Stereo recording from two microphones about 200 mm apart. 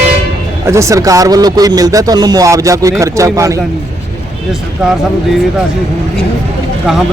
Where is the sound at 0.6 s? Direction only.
15° right (ahead or behind).